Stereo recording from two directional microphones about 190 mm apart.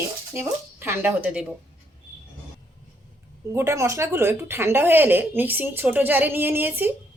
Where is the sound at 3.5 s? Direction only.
15° right (ahead or behind).